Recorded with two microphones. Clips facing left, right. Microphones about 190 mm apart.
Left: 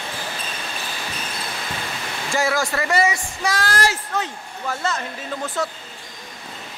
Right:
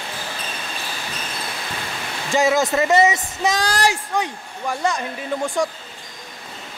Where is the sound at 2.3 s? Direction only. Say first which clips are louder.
Right 4 dB; 20° right (ahead or behind).